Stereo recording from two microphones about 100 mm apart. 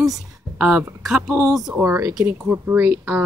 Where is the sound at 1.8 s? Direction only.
30° right (ahead or behind).